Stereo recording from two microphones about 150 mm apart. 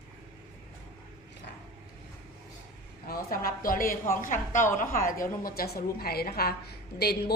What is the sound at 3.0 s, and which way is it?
A man's voice, 75° left (ahead or behind).